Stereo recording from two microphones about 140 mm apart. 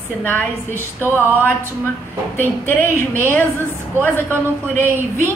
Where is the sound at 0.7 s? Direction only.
15° right (ahead or behind).